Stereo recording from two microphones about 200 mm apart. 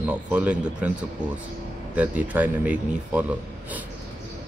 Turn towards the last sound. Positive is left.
turn(degrees=-5)  # may be behind; listen again after turning